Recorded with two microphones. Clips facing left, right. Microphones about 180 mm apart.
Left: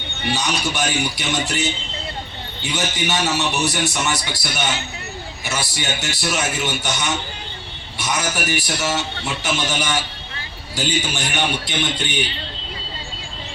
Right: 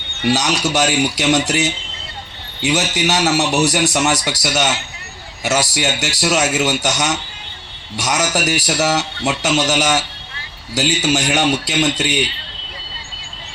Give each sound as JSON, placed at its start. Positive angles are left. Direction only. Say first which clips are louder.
{"t": 0.3, "sound": "a man's voice", "louder": "right 6 dB", "side_deg": -80}
{"t": 4.3, "sound": "a man's voice", "louder": "right 6 dB", "side_deg": -85}